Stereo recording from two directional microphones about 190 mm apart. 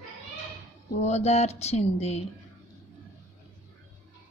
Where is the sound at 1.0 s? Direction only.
35° left (ahead or behind).